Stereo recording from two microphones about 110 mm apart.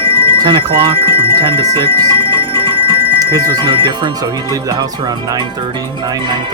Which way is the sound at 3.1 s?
35° right (ahead or behind).